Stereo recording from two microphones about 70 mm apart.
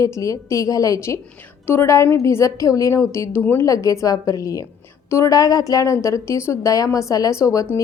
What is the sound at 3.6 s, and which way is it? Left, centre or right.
A woman's voice, left.